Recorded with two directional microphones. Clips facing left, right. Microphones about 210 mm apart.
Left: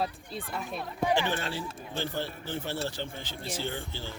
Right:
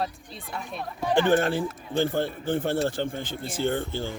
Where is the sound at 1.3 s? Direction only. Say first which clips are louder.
Right 11 dB; 50° right (ahead or behind).